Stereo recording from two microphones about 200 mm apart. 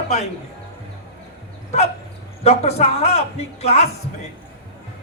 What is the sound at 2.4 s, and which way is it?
A man's voice, 30° left (ahead or behind).